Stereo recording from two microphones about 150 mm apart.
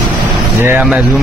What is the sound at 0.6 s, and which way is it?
Speech, 10° right (ahead or behind).